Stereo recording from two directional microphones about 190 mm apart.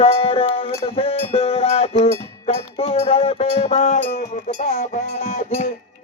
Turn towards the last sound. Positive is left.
turn(degrees=40)  # may be behind; listen again after turning